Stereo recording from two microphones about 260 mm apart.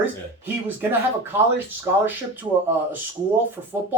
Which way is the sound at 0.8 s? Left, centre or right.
Centre.